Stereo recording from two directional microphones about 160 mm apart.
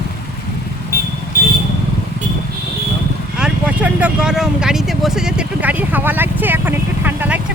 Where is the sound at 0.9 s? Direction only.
75° left (ahead or behind).